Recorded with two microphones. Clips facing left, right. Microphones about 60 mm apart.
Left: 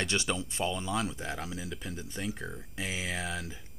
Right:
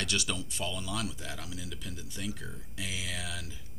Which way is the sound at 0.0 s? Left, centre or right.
Left.